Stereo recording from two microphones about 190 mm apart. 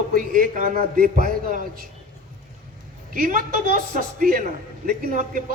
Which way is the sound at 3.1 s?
45° right (ahead or behind).